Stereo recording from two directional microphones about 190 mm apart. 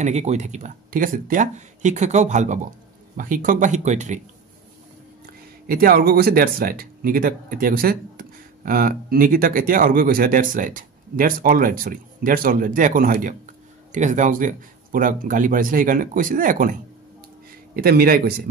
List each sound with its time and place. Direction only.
0.0 s speech: 35° right (ahead or behind)
5.7 s speech: 50° right (ahead or behind)
17.7 s speech: 55° right (ahead or behind)